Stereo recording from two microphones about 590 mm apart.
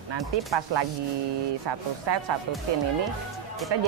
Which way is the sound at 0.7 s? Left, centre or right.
Right.